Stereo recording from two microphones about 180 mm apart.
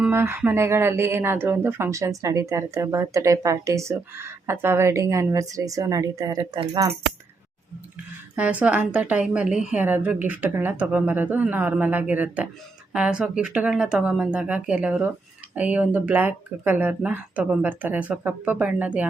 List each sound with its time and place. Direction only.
0.0 s speech: 10° right (ahead or behind)
8.4 s speech: 10° right (ahead or behind)